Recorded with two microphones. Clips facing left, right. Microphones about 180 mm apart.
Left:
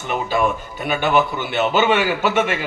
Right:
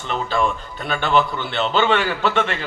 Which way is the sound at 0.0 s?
15° left (ahead or behind).